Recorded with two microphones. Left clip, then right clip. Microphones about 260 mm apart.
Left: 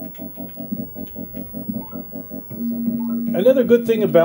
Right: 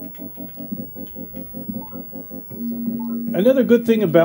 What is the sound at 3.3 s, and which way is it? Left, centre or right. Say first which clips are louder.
Speech: left 1 dB; right.